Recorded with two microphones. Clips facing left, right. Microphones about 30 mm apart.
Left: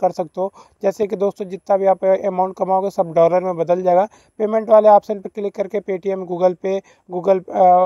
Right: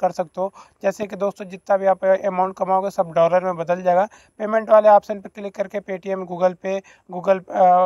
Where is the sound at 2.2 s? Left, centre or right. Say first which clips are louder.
Left 2 dB; right.